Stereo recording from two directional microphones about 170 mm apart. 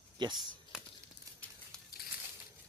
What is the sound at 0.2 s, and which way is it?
Speech, 25° right (ahead or behind).